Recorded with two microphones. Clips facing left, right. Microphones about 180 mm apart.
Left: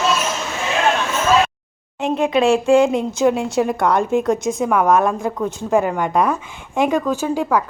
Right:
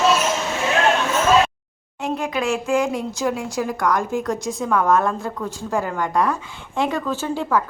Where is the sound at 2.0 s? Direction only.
25° left (ahead or behind).